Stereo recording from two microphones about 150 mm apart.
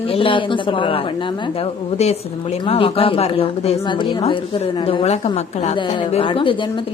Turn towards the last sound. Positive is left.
turn(degrees=35)  # may be behind; listen again after turning